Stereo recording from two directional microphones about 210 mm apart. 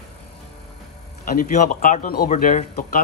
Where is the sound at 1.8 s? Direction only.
40° left (ahead or behind).